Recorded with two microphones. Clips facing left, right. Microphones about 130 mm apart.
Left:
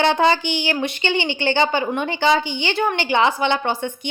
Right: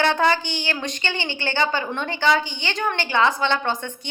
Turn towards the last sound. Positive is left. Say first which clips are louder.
# left 3 dB
turn(degrees=15)  # may be behind; listen again after turning